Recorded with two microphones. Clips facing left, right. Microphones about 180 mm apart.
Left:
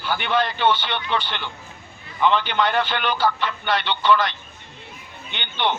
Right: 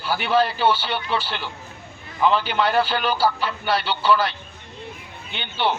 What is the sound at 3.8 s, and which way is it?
Speech, 35° right (ahead or behind).